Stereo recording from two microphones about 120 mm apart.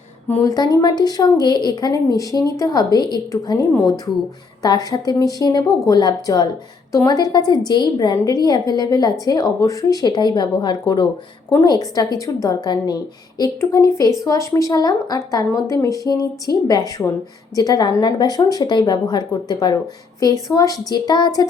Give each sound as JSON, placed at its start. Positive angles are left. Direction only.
{"t": 0.4, "sound": "a woman's voice", "side_deg": 30}